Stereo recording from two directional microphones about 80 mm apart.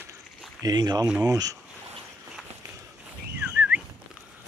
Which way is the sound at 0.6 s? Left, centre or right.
Right.